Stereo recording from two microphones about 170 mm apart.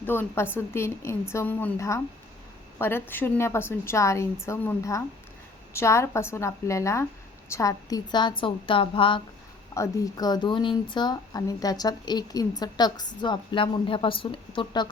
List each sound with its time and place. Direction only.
0.0 s a woman's voice: 15° left (ahead or behind); by 9.2 s 30° left (ahead or behind)
9.7 s a woman's voice: 20° left (ahead or behind)